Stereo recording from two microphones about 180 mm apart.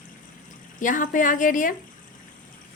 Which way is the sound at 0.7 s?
45° left (ahead or behind).